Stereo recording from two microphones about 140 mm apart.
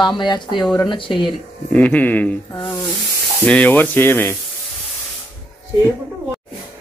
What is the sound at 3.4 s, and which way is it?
Speech, 10° left (ahead or behind).